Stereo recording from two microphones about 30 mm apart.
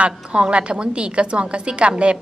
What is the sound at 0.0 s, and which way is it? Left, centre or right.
A woman's voice, right.